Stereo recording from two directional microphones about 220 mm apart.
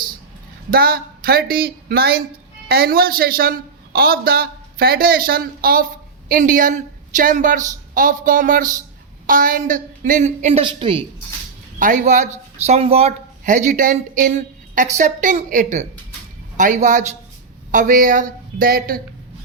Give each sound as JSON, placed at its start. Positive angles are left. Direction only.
{"t": 0.7, "sound": "a man's voice", "side_deg": -40}
{"t": 11.8, "sound": "speech", "side_deg": -35}